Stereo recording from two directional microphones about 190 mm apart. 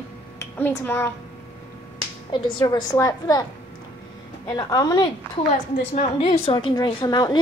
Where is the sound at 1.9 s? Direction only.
25° left (ahead or behind).